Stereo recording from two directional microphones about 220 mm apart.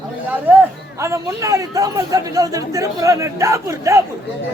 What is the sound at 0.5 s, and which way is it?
Speech, 10° right (ahead or behind).